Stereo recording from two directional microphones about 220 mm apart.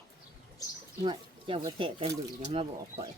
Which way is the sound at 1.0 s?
20° right (ahead or behind).